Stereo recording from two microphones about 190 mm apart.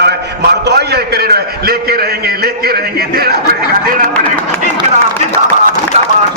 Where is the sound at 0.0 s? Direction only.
60° right (ahead or behind).